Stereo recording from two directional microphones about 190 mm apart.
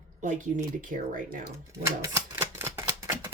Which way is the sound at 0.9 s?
45° right (ahead or behind).